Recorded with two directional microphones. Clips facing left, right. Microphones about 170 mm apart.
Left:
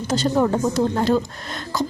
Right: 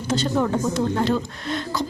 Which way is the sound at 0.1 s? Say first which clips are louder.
Left 2 dB; 40° left (ahead or behind).